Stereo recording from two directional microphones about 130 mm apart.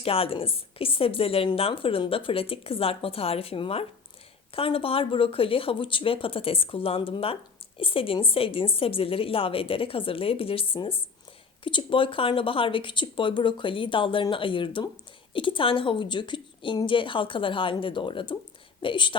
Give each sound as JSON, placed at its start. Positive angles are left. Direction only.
{"t": 0.0, "sound": "speech", "side_deg": 45}